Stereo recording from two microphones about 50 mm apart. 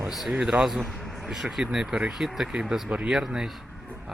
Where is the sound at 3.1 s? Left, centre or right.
Centre.